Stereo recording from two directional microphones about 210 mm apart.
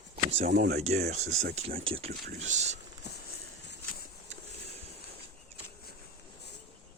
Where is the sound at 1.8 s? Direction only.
25° right (ahead or behind).